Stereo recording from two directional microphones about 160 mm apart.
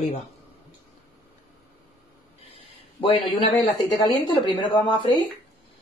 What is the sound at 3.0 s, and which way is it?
Speech, 35° left (ahead or behind).